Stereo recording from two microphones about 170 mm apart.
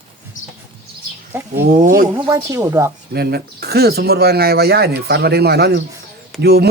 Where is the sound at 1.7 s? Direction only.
50° right (ahead or behind).